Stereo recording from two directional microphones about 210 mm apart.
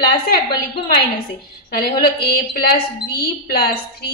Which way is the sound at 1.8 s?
45° left (ahead or behind).